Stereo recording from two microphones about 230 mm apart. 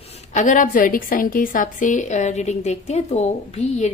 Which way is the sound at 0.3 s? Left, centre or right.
Left.